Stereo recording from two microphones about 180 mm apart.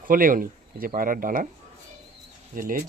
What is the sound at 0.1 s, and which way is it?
Speech, 50° right (ahead or behind).